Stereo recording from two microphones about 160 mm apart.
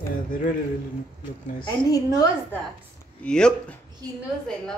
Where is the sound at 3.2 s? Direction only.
5° left (ahead or behind).